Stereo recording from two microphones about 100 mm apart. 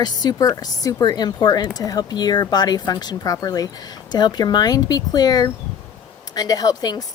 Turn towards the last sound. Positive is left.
turn(degrees=40)  # may be behind; listen again after turning